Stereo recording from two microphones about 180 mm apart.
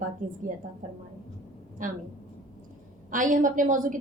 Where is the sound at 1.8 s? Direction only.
45° right (ahead or behind).